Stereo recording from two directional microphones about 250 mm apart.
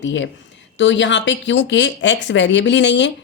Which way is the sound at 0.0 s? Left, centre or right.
Left.